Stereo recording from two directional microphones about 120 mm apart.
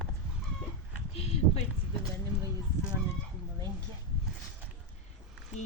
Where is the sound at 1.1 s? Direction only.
60° left (ahead or behind).